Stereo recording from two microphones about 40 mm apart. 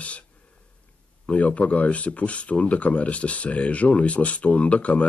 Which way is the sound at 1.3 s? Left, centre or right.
Left.